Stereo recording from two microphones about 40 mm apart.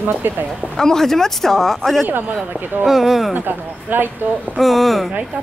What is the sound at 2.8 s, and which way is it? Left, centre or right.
Speech, centre.